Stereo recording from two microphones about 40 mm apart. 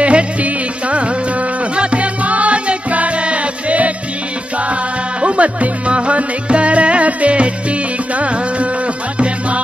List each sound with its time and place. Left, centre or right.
0.0 s music: right
5.2 s music: right